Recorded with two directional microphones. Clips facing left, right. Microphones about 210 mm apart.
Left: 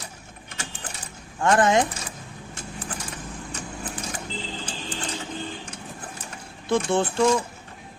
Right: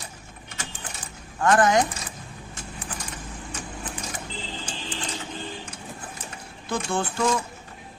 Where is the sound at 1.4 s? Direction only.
25° left (ahead or behind).